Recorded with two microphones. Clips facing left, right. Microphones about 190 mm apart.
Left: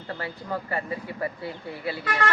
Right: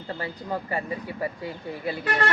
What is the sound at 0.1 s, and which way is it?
Speech, 15° right (ahead or behind).